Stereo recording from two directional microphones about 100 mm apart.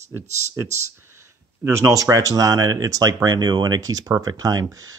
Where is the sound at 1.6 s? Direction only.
30° right (ahead or behind).